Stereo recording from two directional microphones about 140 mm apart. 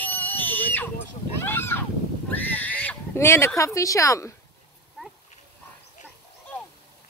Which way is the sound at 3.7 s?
20° left (ahead or behind).